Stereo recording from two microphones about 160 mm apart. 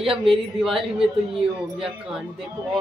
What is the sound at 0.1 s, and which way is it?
Speech, 35° right (ahead or behind).